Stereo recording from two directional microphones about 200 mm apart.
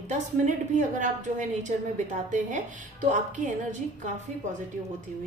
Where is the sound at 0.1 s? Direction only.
40° right (ahead or behind).